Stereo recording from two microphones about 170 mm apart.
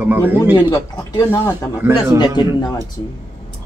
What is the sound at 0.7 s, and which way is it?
Speech, 25° left (ahead or behind).